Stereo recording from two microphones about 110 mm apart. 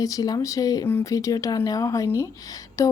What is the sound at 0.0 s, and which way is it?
Speech, 35° left (ahead or behind).